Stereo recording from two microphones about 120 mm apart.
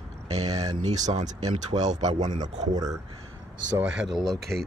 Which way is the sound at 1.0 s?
75° right (ahead or behind).